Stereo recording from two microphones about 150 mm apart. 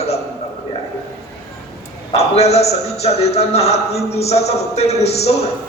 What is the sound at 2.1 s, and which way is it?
A man's voice, 45° left (ahead or behind).